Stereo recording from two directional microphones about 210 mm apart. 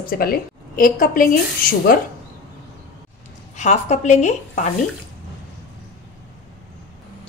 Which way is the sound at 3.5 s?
35° left (ahead or behind).